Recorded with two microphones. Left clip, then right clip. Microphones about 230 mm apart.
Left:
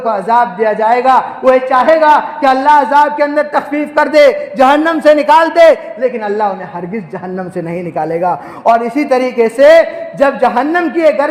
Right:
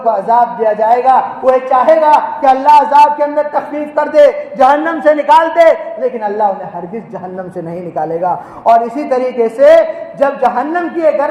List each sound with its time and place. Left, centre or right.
0.0 s a man's voice: left
7.9 s a man's voice: left